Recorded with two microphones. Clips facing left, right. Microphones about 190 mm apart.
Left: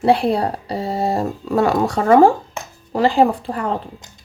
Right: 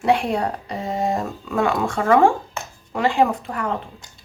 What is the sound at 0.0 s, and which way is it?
Speech, 35° left (ahead or behind).